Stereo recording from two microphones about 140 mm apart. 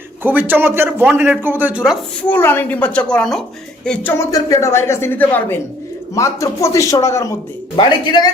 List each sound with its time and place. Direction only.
0.2 s a man's voice: 15° right (ahead or behind)
2.2 s speech: 15° left (ahead or behind)
7.8 s a man's voice: 30° left (ahead or behind)